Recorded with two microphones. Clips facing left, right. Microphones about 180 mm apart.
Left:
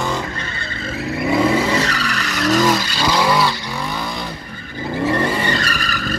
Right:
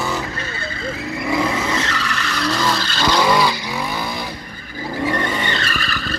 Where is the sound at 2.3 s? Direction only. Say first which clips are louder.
Left 5 dB; 20° left (ahead or behind); by 3.5 s 5° left (ahead or behind).